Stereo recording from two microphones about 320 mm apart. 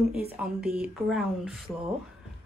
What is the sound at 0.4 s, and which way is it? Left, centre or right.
Speech, centre.